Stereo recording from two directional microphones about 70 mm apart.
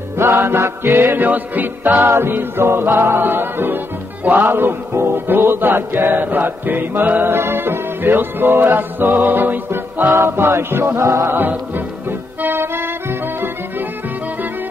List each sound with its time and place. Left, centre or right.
0.2 s music: right
11.3 s music: right